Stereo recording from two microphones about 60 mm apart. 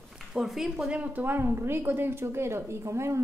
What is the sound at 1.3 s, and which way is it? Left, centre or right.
A woman's voice, right.